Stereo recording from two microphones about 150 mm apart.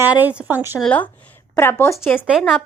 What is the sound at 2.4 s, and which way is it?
Speech, 5° left (ahead or behind).